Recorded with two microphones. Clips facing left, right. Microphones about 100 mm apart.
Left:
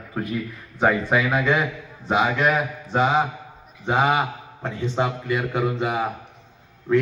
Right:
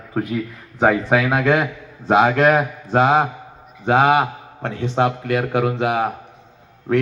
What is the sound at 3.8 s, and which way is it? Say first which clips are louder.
A man's voice: right 5 dB; 75° right (ahead or behind).